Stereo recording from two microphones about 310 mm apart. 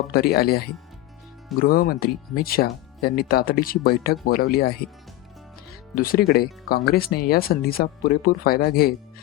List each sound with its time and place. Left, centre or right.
0.1 s speech: left
1.6 s speech: left
5.9 s speech: left